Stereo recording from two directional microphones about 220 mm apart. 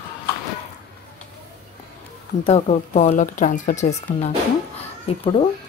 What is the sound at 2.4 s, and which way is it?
A woman's voice, 30° left (ahead or behind).